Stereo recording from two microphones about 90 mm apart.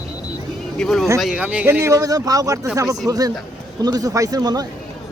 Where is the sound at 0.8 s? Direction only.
5° left (ahead or behind).